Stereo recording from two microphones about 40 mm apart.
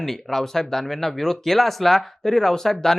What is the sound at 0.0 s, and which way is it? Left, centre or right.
Speech, centre.